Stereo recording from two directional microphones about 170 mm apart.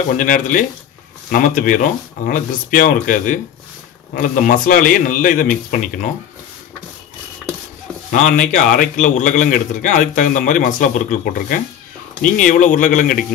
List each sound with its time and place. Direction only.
0.2 s a man's voice: 50° left (ahead or behind)
8.1 s a man's voice: 45° left (ahead or behind)